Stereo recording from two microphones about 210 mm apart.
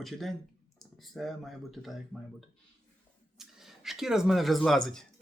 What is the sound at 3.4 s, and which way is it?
Speech, centre (ahead or behind).